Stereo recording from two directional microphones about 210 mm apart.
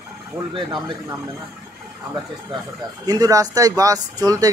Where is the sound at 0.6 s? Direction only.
25° right (ahead or behind).